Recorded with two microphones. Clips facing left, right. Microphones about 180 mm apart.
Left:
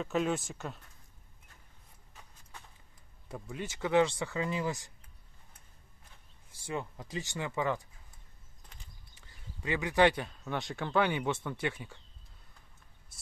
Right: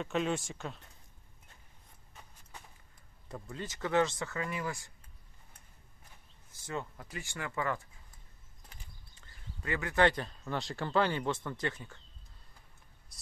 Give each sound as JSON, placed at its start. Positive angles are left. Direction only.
{"t": 0.0, "sound": "speech", "side_deg": 0}
{"t": 3.3, "sound": "speech", "side_deg": 10}
{"t": 6.7, "sound": "speech", "side_deg": 15}
{"t": 9.1, "sound": "speech", "side_deg": 15}